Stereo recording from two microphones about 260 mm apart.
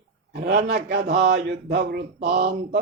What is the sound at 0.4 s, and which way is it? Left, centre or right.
Speech, right.